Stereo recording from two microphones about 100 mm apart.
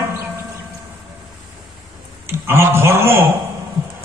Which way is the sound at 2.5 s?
25° right (ahead or behind).